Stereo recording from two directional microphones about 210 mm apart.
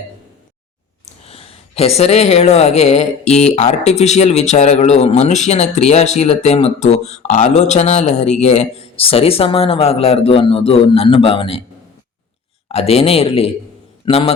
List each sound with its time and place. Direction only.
1.2 s speech: 30° left (ahead or behind)
12.6 s a man's voice: 30° left (ahead or behind)